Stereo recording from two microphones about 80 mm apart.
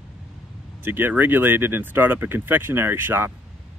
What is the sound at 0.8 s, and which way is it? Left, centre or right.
Speech, right.